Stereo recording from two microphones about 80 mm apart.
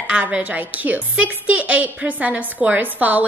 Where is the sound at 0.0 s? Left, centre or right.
Centre.